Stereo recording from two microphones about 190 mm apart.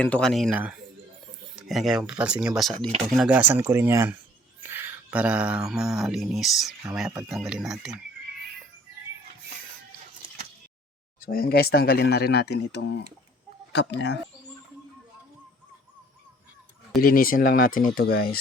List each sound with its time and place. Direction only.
0.0 s speech: 5° left (ahead or behind)
11.3 s speech: 50° left (ahead or behind)
17.0 s speech: 50° left (ahead or behind)